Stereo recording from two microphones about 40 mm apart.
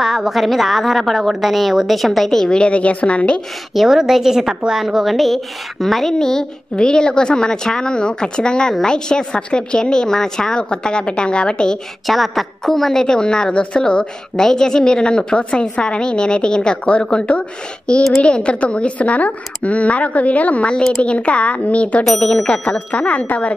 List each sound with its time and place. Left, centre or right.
0.0 s a woman's voice: centre
2.5 s speech: left
3.7 s a woman's voice: centre
12.1 s a woman's voice: centre
13.0 s a woman's voice: centre; by 23.5 s left